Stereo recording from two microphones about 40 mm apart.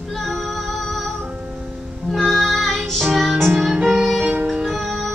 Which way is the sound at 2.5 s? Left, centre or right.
Centre.